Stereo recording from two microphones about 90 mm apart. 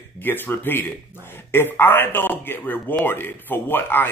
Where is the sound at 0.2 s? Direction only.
20° left (ahead or behind).